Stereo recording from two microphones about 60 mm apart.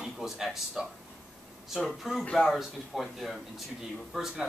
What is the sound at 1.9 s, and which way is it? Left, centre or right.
Speech, centre.